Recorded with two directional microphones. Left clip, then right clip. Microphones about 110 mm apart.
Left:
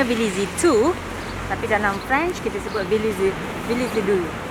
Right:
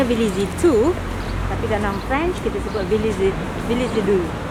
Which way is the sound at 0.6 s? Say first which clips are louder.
Right 1 dB; 50° left (ahead or behind).